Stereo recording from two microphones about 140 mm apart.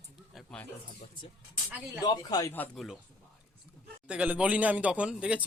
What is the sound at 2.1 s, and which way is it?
Speech, 30° left (ahead or behind).